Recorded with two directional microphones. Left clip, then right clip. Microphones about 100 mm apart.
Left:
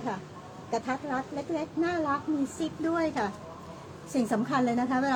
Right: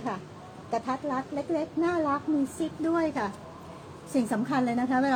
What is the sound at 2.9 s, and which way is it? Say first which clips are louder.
A woman's voice: even; 5° left (ahead or behind).